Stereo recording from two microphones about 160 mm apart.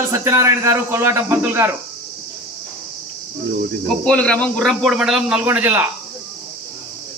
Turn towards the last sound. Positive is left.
turn(degrees=-10)  # may be behind; listen again after turning